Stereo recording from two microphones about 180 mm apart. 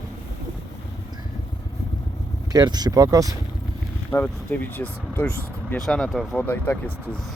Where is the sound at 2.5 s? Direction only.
25° right (ahead or behind).